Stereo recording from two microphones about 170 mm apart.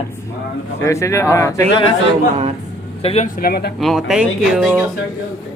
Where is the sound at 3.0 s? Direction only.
35° left (ahead or behind).